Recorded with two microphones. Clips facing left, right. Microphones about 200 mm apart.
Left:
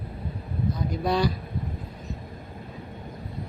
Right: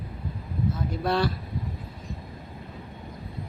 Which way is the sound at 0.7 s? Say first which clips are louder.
Left 1 dB; centre (ahead or behind).